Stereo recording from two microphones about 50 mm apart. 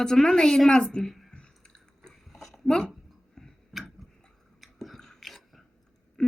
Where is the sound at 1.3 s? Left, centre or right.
Centre.